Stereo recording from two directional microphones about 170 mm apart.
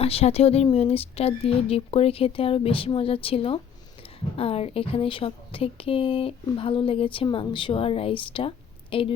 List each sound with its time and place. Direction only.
0.0 s speech: 35° left (ahead or behind)